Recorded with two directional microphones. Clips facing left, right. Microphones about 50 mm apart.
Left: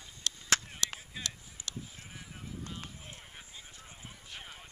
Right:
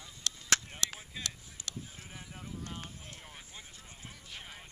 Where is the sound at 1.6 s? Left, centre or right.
Centre.